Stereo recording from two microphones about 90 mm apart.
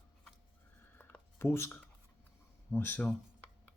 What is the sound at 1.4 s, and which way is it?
Speech, 30° left (ahead or behind).